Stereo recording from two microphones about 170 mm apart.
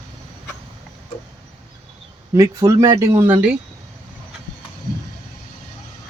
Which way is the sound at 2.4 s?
20° right (ahead or behind).